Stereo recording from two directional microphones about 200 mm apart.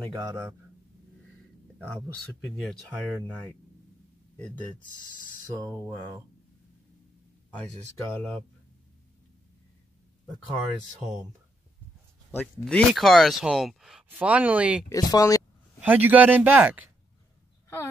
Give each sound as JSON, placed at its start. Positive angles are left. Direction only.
{"t": 0.1, "sound": "a man's voice", "side_deg": -20}
{"t": 1.8, "sound": "speech", "side_deg": -10}
{"t": 12.3, "sound": "speech", "side_deg": 10}
{"t": 14.9, "sound": "speech", "side_deg": 20}
{"t": 15.8, "sound": "speech", "side_deg": -10}